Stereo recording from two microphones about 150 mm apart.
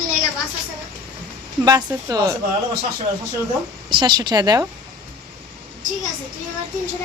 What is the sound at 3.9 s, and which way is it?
Speech, 30° right (ahead or behind).